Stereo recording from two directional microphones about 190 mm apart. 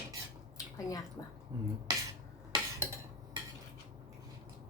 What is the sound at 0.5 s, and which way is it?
Drip, 20° left (ahead or behind).